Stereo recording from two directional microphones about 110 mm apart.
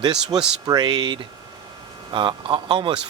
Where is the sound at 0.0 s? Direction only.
35° right (ahead or behind).